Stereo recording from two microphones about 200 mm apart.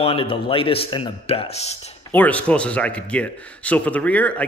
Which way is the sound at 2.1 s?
10° left (ahead or behind).